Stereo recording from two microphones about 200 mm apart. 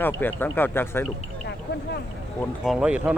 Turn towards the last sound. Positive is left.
turn(degrees=-5)  # may be behind; listen again after turning